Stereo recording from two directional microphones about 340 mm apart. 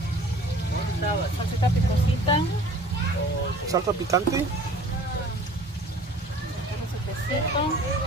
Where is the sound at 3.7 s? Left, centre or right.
Centre.